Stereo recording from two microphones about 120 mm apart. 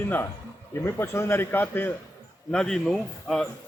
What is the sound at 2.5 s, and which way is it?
Speech, 5° left (ahead or behind).